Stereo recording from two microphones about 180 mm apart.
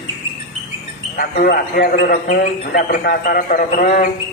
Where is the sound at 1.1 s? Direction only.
55° left (ahead or behind).